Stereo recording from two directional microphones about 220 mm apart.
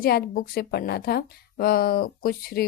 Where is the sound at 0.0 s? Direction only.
45° left (ahead or behind).